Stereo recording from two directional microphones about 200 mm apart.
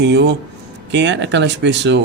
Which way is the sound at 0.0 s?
60° right (ahead or behind).